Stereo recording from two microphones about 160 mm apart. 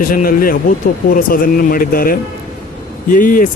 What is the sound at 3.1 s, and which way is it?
Speech, 60° left (ahead or behind).